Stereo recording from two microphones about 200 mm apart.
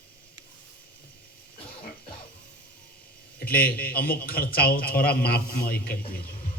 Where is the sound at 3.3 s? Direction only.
50° left (ahead or behind).